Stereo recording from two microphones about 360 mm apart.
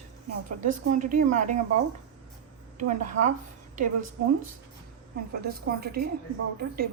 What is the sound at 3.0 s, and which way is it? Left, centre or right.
Speech, right.